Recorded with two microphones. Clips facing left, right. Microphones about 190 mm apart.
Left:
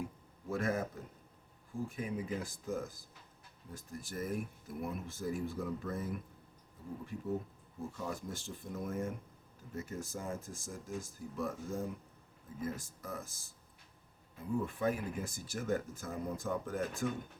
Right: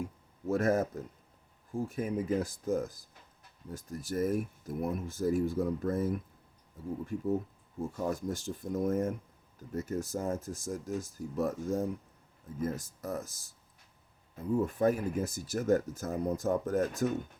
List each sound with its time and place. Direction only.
0.4 s speech: 45° right (ahead or behind)
14.6 s speech: 45° right (ahead or behind)